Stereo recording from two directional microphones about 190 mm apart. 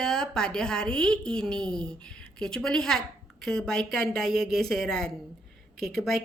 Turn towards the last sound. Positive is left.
turn(degrees=0)  # may be behind; listen again after turning